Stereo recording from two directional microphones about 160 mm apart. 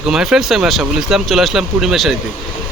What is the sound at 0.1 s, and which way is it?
Speech, 5° right (ahead or behind).